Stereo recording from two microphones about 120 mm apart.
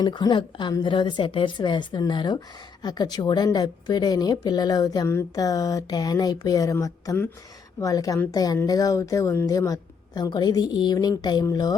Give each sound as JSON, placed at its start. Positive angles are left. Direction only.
{"t": 0.0, "sound": "a woman's voice", "side_deg": 40}